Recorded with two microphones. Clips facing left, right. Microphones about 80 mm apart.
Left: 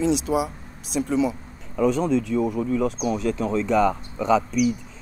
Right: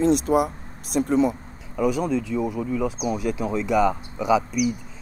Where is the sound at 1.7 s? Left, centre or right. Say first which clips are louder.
Left 2 dB; centre.